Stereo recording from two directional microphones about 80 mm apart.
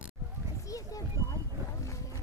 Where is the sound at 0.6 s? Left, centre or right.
Left.